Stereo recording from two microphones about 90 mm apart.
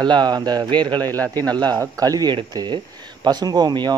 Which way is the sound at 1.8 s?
40° right (ahead or behind).